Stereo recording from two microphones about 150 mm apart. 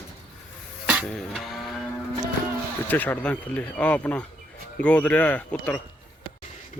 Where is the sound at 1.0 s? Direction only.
Centre (ahead or behind).